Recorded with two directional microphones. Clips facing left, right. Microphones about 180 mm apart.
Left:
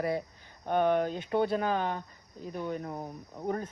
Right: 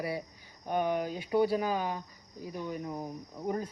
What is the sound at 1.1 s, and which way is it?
Speech, 10° right (ahead or behind).